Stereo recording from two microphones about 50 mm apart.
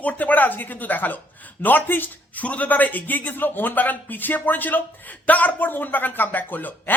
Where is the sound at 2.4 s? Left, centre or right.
Left.